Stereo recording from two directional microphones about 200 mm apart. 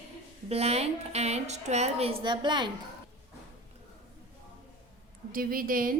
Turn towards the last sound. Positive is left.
turn(degrees=-45)  # may be behind; listen again after turning